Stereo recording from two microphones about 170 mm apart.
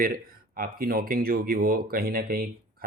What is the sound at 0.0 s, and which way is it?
Speech, 60° right (ahead or behind).